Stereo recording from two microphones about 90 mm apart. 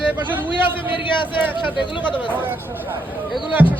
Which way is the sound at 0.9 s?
65° left (ahead or behind).